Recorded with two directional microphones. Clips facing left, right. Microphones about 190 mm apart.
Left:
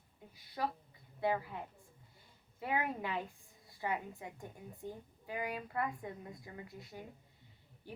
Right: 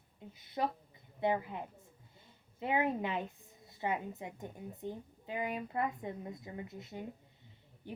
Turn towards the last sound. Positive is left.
turn(degrees=-20)  # may be behind; listen again after turning